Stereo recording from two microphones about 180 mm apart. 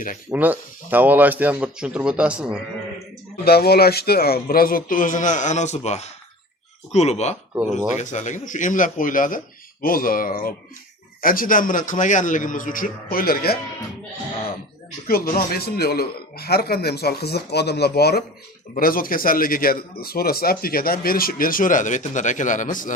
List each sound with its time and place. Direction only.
0.3 s speech: 10° right (ahead or behind)
3.4 s a man's voice: 60° left (ahead or behind)
15.0 s a man's voice: 55° left (ahead or behind)